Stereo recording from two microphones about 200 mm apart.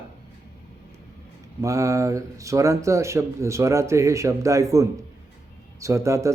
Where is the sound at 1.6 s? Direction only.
15° right (ahead or behind).